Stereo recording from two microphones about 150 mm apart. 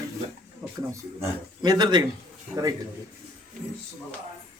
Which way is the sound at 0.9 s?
25° right (ahead or behind).